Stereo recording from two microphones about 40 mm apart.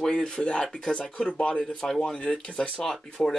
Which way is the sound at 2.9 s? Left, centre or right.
Centre.